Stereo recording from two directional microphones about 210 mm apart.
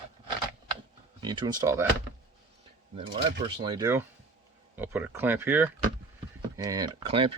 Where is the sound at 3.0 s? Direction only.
25° right (ahead or behind).